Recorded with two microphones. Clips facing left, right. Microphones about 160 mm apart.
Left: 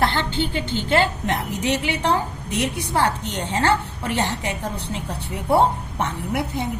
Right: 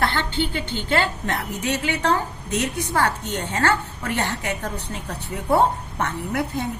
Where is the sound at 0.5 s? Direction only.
15° left (ahead or behind).